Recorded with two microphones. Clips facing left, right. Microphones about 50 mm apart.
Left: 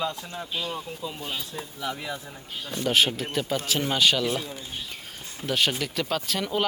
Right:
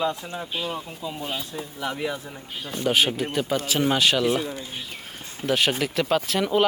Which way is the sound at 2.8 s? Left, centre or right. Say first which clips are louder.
Right 1 dB; centre.